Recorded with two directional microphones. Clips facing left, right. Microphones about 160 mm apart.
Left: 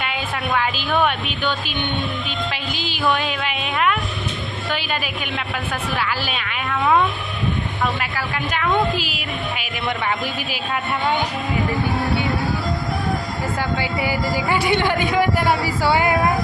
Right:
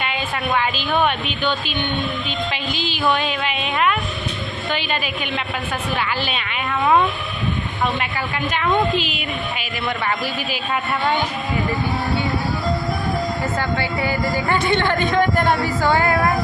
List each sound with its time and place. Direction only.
3.6 s a woman's voice: centre (ahead or behind)
6.7 s a woman's voice: 5° right (ahead or behind)
8.6 s a woman's voice: 5° left (ahead or behind)
13.6 s speech: 10° left (ahead or behind)